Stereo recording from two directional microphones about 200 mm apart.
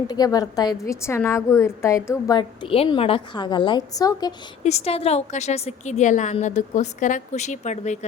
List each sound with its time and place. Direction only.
0.1 s a woman's voice: 20° left (ahead or behind)
4.6 s a woman's voice: 30° left (ahead or behind)